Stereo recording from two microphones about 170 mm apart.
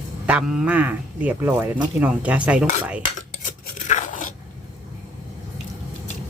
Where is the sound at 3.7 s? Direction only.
45° left (ahead or behind).